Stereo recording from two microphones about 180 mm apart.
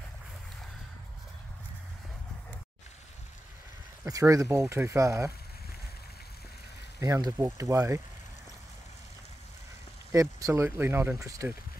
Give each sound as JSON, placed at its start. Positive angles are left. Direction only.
{"t": 4.0, "sound": "speech", "side_deg": -15}
{"t": 7.0, "sound": "speech", "side_deg": -20}
{"t": 10.1, "sound": "speech", "side_deg": -15}